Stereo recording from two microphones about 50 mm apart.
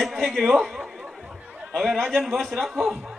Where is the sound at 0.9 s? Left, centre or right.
Centre.